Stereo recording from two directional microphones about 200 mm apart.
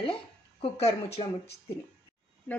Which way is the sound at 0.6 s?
30° left (ahead or behind).